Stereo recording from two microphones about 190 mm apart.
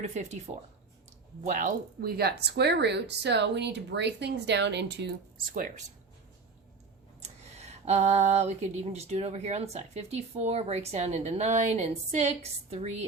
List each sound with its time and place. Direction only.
0.0 s speech: 35° right (ahead or behind); by 5.1 s 65° right (ahead or behind)
7.2 s speech: 35° right (ahead or behind)